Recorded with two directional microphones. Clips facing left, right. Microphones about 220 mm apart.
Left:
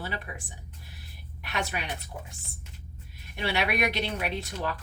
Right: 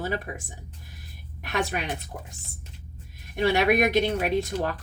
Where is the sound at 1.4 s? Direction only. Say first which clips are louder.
Right 5 dB; 45° right (ahead or behind).